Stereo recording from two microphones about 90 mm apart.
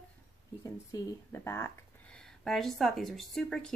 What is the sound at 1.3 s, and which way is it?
Speech, 25° left (ahead or behind).